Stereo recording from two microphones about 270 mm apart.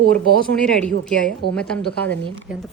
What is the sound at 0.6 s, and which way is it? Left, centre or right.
A woman's voice, centre.